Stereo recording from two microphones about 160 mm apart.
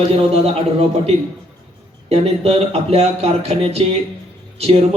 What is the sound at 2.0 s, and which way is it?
Speech, 40° right (ahead or behind).